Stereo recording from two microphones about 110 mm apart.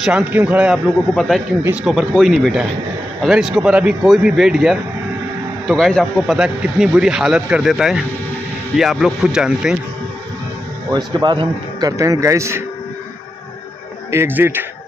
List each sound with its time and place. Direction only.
0.0 s speech: 10° right (ahead or behind)
1.3 s speech: 5° left (ahead or behind)
10.9 s a man's voice: 40° right (ahead or behind)
12.0 s a man's voice: 30° right (ahead or behind)
14.1 s a man's voice: 20° right (ahead or behind)